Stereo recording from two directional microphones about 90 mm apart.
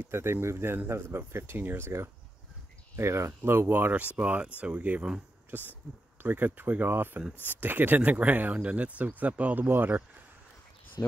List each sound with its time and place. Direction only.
0.0 s speech: 30° right (ahead or behind)
11.0 s speech: 45° left (ahead or behind)